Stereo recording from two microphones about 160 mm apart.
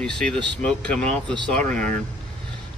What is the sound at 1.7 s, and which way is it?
Speech, 55° right (ahead or behind).